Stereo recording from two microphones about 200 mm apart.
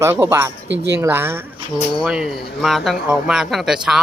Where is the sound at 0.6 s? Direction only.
65° right (ahead or behind).